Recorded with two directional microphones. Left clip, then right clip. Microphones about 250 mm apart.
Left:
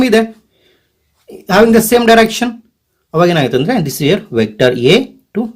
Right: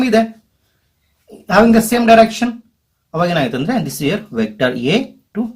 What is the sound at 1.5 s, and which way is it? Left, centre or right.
Speech, left.